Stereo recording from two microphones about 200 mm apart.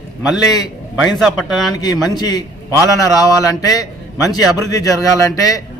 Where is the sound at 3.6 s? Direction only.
15° left (ahead or behind).